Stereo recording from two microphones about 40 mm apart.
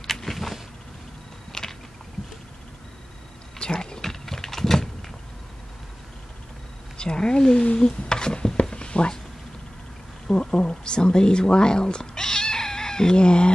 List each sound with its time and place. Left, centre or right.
0.0 s vehicle: centre
1.5 s a sound: centre
3.5 s typing: left
7.0 s speech: left
8.7 s a sound: left
10.2 s speech: centre